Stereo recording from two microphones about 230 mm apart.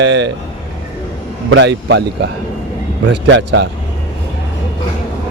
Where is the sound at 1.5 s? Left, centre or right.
Right.